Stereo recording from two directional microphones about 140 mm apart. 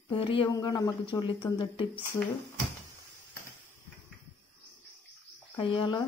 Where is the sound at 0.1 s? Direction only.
40° left (ahead or behind).